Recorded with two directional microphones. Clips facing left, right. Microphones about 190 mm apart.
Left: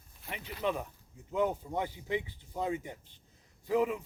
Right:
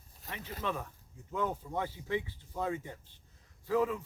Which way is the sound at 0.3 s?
15° left (ahead or behind).